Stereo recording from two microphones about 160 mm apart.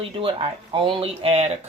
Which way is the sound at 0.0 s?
35° right (ahead or behind).